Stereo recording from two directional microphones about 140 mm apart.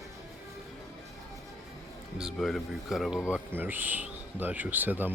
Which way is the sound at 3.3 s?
15° right (ahead or behind).